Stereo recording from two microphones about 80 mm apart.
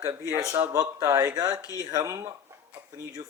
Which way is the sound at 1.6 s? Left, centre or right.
Left.